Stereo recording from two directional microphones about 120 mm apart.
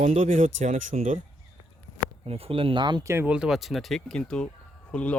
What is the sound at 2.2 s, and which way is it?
Speech, 55° right (ahead or behind).